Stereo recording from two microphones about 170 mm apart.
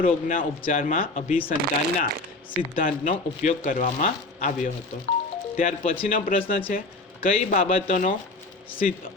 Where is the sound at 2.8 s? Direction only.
50° left (ahead or behind).